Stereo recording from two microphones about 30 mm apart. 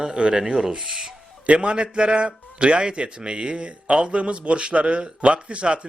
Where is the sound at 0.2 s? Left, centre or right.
Right.